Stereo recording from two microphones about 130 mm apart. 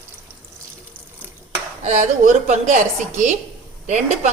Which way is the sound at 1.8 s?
70° right (ahead or behind).